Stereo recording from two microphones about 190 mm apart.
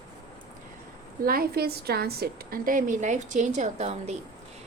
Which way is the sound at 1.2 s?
50° right (ahead or behind).